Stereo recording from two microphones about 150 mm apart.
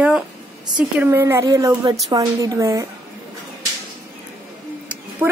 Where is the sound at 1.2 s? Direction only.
20° right (ahead or behind).